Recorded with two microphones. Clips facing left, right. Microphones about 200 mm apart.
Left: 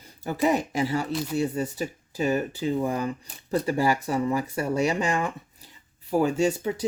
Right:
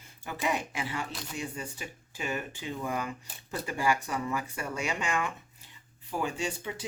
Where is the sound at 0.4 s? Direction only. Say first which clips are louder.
Left 9 dB; 40° left (ahead or behind).